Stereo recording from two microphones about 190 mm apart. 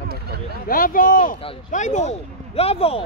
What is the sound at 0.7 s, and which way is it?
Speech, 50° left (ahead or behind).